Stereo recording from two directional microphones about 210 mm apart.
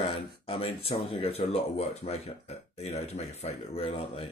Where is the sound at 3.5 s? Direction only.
30° left (ahead or behind).